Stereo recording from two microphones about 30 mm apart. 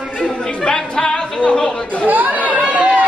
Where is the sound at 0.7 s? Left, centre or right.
Left.